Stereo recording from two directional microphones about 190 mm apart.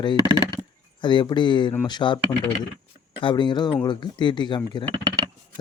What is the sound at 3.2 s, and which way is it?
Speech, 25° left (ahead or behind).